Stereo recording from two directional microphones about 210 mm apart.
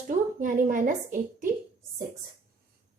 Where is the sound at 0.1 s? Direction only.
40° right (ahead or behind).